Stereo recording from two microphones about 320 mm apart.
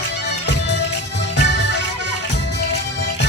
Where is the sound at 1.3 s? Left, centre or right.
Left.